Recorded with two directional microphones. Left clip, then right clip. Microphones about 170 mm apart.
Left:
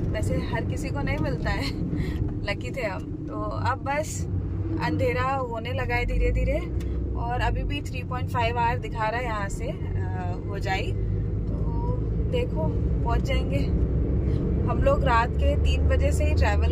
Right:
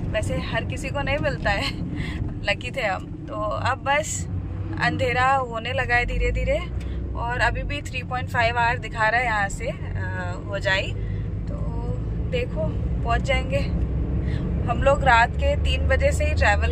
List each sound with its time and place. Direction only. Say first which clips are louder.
0.1 s speech: right 5 dB; 10° left (ahead or behind)
13.1 s speech: right 7 dB; 5° left (ahead or behind)
14.8 s speech: right 5 dB; 5° left (ahead or behind)